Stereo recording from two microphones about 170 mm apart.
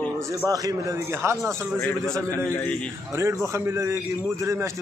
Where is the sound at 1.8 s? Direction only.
5° left (ahead or behind).